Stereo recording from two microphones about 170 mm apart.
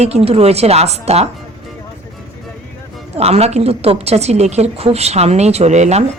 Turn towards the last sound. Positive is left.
turn(degrees=-40)  # may be behind; listen again after turning